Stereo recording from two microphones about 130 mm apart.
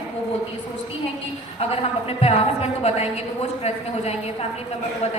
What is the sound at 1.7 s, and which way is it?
A woman's voice, 50° left (ahead or behind).